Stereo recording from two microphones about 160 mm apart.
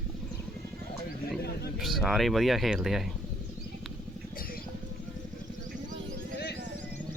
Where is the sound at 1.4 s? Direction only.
85° left.